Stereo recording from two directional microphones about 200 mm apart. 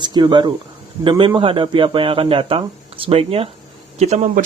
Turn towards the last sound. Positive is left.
turn(degrees=-35)  # may be behind; listen again after turning